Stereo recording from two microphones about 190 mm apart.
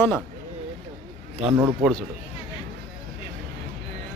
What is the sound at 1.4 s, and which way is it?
Speech, 10° right (ahead or behind).